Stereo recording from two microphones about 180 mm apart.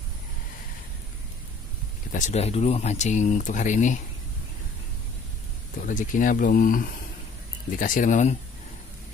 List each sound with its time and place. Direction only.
2.1 s speech: 40° left (ahead or behind)
5.8 s speech: 45° left (ahead or behind)